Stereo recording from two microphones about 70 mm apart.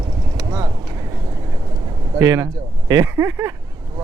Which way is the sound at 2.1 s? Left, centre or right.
Right.